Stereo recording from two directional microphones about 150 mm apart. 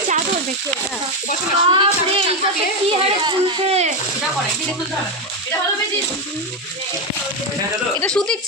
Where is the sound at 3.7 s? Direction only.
45° right (ahead or behind).